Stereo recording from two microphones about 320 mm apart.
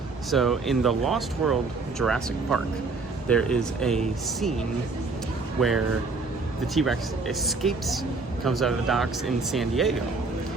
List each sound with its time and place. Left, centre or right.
0.3 s speech: centre
5.5 s speech: centre